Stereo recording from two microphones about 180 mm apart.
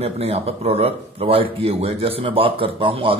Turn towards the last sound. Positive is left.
turn(degrees=-30)  # may be behind; listen again after turning